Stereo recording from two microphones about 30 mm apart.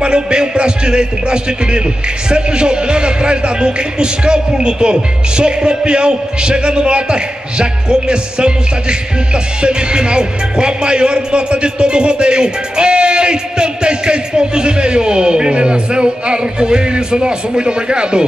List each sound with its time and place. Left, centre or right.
0.0 s a man's voice: right